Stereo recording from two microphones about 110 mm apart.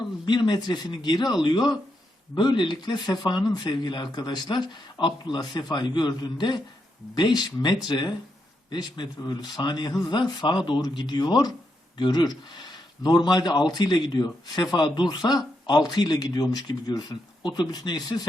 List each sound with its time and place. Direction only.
0.3 s speech: 40° left (ahead or behind)